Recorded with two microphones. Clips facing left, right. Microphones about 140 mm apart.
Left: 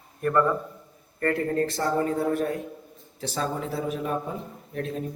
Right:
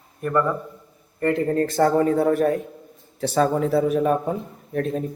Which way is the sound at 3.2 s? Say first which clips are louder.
Right 9 dB; 60° right (ahead or behind).